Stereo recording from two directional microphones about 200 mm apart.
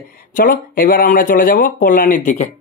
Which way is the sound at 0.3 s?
45° left (ahead or behind).